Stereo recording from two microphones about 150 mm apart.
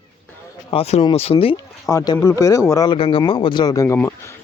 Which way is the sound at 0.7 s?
40° left (ahead or behind).